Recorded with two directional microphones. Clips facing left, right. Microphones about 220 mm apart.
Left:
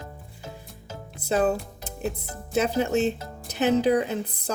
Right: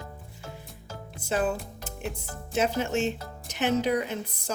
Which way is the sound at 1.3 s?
35° left (ahead or behind).